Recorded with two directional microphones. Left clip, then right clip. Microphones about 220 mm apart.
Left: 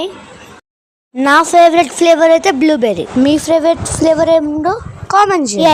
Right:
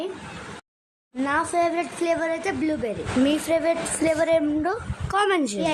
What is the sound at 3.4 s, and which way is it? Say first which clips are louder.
A woman's voice: left 11 dB; 25° left (ahead or behind).